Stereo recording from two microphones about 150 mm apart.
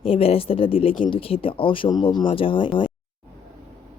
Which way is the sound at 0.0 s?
40° left (ahead or behind).